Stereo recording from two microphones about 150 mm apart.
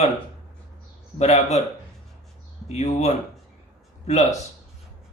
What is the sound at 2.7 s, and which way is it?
Speech, 45° left (ahead or behind).